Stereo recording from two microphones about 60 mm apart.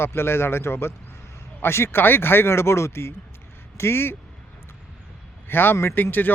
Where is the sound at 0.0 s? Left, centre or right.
Left.